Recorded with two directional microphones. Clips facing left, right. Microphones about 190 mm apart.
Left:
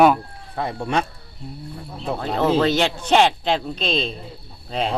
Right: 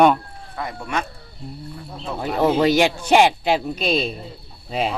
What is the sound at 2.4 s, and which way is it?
Speech, 10° right (ahead or behind).